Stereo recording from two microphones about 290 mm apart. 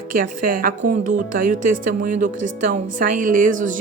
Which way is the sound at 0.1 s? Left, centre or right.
Right.